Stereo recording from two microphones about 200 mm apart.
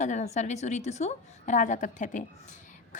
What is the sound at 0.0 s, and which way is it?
A woman's voice, 35° left (ahead or behind).